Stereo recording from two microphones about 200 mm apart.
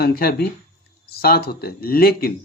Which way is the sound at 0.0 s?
50° left (ahead or behind).